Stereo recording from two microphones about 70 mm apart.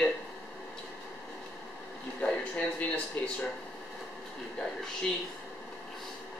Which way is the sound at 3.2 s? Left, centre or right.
Left.